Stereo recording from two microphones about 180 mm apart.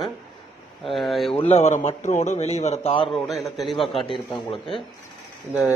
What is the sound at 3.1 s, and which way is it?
Speech, centre (ahead or behind).